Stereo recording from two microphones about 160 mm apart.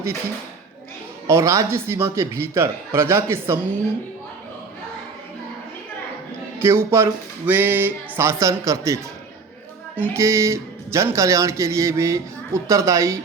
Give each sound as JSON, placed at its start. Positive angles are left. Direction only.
{"t": 1.3, "sound": "speech", "side_deg": -20}
{"t": 6.6, "sound": "speech", "side_deg": -15}
{"t": 10.0, "sound": "speech", "side_deg": -20}